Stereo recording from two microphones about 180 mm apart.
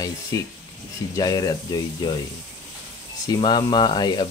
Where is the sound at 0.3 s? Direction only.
20° left (ahead or behind).